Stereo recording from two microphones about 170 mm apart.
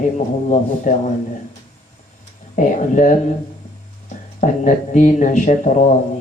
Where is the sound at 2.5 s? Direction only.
50° left (ahead or behind).